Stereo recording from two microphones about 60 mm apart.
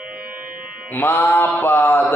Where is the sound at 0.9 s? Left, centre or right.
Left.